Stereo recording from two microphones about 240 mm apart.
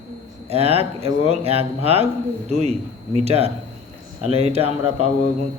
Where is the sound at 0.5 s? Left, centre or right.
Right.